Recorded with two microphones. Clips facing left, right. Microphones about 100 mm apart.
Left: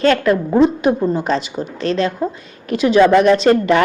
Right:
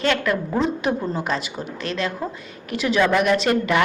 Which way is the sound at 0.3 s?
20° left (ahead or behind).